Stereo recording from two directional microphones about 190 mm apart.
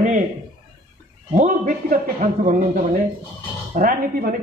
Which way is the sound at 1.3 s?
45° right (ahead or behind).